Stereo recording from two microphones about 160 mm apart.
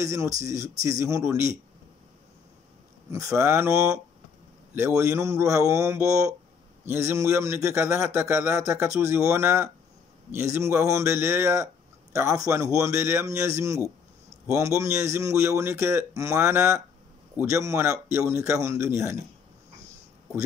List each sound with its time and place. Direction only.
0.0 s speech: 20° right (ahead or behind)
3.3 s a man's voice: 15° right (ahead or behind)